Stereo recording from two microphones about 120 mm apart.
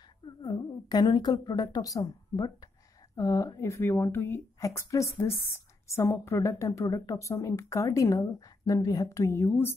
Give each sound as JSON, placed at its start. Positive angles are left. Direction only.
{"t": 0.4, "sound": "a woman's voice", "side_deg": 40}